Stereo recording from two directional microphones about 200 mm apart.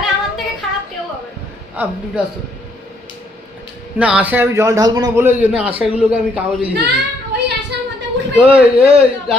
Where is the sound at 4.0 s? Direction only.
5° right (ahead or behind).